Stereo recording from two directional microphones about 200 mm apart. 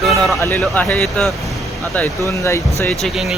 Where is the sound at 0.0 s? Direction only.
Centre (ahead or behind).